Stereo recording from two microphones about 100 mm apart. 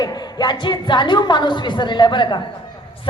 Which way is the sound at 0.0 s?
40° left (ahead or behind).